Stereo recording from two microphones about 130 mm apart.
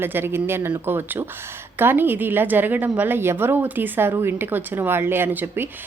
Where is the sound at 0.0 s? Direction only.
15° right (ahead or behind).